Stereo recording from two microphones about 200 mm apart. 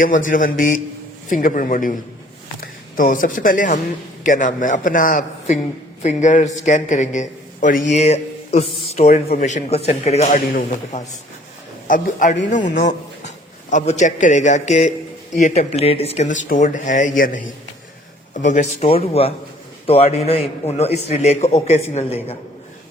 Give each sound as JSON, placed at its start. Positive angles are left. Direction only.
{"t": 0.0, "sound": "a man's voice", "side_deg": 40}